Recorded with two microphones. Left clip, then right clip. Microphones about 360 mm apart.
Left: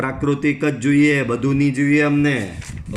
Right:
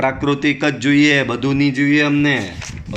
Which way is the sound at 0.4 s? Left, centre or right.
Centre.